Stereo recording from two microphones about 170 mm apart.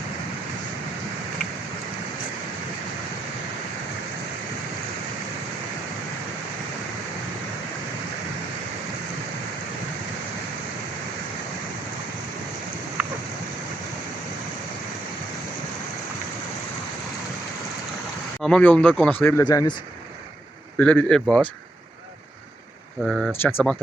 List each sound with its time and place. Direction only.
18.4 s speech: 5° left (ahead or behind)
19.5 s speech: 25° left (ahead or behind)
20.7 s speech: 5° left (ahead or behind)
23.0 s speech: centre (ahead or behind)
23.4 s speech: 10° left (ahead or behind)